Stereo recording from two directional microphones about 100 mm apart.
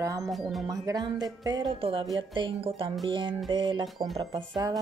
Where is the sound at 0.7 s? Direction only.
40° right (ahead or behind).